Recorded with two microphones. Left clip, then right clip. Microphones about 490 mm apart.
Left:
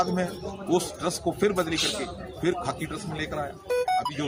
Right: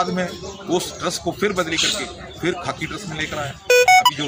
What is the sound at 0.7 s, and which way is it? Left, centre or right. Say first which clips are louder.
A man's voice: right 4 dB; left.